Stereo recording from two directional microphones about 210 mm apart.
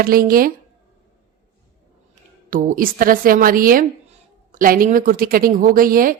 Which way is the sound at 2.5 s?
40° right (ahead or behind).